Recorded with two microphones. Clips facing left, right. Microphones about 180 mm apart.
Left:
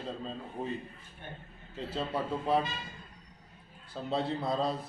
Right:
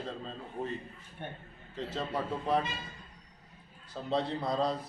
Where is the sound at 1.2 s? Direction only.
65° right (ahead or behind).